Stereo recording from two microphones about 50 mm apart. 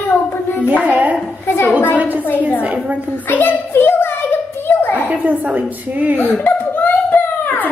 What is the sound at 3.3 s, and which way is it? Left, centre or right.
Speech, left.